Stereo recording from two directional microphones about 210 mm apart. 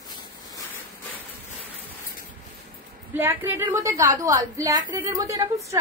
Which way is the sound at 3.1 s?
10° right (ahead or behind).